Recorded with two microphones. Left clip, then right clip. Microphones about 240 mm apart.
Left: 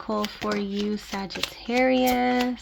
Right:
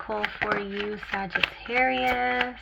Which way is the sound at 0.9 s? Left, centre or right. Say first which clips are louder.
Right 4 dB; left.